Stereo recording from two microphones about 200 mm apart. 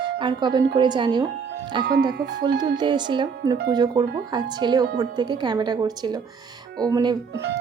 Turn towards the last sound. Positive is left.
turn(degrees=-60)  # may be behind; listen again after turning